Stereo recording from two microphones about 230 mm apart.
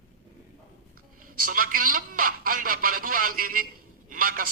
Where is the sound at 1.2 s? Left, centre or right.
Right.